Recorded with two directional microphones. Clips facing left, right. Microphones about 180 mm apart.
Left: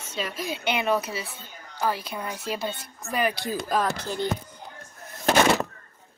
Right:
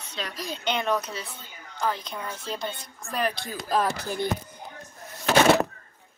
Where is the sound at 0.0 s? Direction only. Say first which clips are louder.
Left 3 dB; 5° left (ahead or behind).